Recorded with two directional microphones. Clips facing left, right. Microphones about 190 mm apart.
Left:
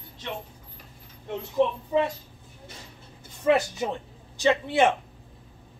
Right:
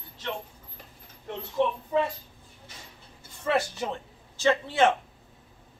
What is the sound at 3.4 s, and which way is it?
A man's voice, 15° left (ahead or behind).